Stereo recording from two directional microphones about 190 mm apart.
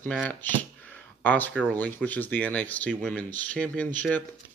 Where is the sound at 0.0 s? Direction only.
5° left (ahead or behind).